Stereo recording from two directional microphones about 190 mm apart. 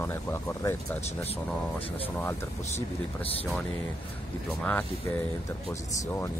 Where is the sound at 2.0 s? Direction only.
10° left (ahead or behind).